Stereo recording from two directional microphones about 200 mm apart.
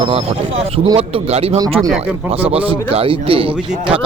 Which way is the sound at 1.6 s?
20° right (ahead or behind).